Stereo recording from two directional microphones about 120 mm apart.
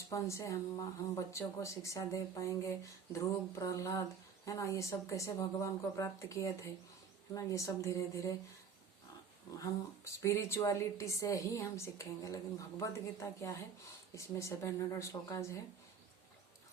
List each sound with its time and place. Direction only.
0.1 s speech: 25° left (ahead or behind)
9.6 s speech: 25° left (ahead or behind)